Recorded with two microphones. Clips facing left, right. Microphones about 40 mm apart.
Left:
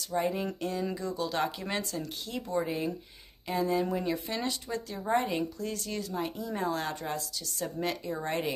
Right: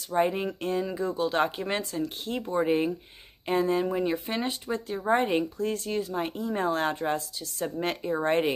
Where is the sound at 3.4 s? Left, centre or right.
Right.